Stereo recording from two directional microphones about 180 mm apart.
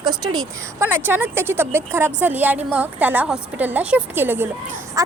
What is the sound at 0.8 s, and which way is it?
A woman's voice, 10° right (ahead or behind).